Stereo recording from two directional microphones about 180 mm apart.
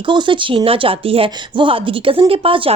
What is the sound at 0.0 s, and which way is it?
Speech, 25° right (ahead or behind).